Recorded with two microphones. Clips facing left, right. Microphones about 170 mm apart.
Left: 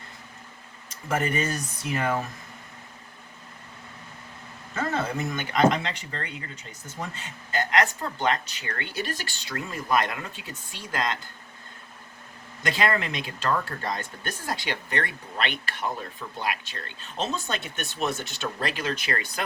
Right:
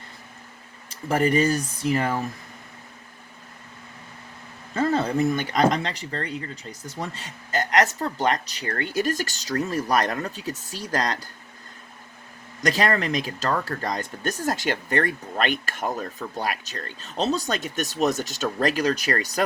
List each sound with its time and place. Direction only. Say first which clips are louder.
0.9 s speech: right 5 dB; 35° right (ahead or behind)
4.7 s speech: right 6 dB; 35° right (ahead or behind)
12.6 s speech: right 3 dB; 40° right (ahead or behind)